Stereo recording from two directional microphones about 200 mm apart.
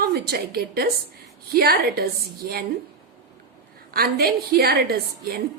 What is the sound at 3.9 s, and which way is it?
A woman's voice, 50° right (ahead or behind).